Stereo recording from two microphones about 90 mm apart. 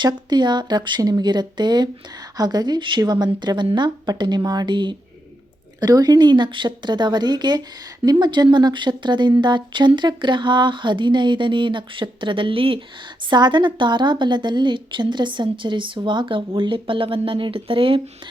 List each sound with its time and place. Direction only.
0.0 s speech: 55° right (ahead or behind)
5.8 s speech: 45° right (ahead or behind); by 12.8 s 80° right
13.3 s speech: 55° right (ahead or behind); by 18.0 s 80° right